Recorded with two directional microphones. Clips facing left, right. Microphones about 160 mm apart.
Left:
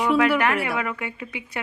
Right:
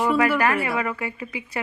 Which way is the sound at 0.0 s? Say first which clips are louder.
Even; centre (ahead or behind).